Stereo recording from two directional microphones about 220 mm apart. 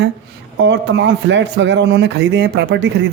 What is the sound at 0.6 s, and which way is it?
Speech, 55° right (ahead or behind).